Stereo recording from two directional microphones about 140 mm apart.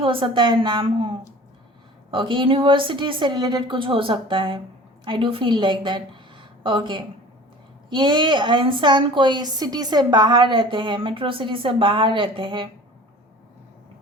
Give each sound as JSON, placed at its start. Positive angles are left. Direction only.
{"t": 0.0, "sound": "a woman's voice", "side_deg": -40}